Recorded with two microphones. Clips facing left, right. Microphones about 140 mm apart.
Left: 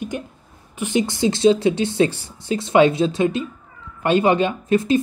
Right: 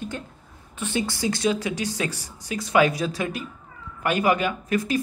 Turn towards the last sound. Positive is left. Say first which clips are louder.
# left 7 dB
turn(degrees=25)  # may be behind; listen again after turning